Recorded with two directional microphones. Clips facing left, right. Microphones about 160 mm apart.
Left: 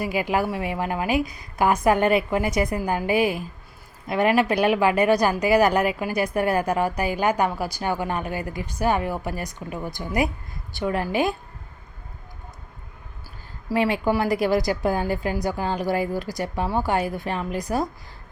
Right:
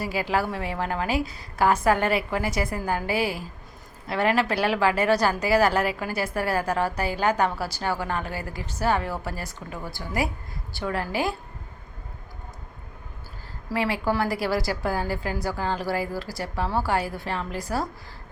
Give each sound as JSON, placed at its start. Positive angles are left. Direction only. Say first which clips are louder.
{"t": 0.0, "sound": "a woman's voice", "louder": "left 2 dB", "side_deg": 15}
{"t": 13.7, "sound": "a woman's voice", "louder": "left 4 dB", "side_deg": 20}